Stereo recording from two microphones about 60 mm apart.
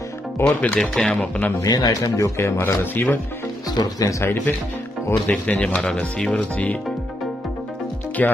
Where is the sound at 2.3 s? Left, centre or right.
Left.